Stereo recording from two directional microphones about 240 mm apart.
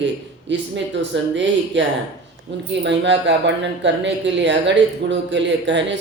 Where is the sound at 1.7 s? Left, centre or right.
Right.